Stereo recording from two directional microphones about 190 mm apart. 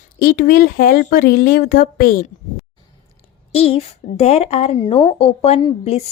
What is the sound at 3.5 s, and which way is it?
A woman's voice, 30° left (ahead or behind).